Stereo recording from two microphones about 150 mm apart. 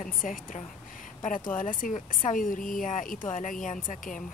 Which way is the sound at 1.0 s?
55° left (ahead or behind).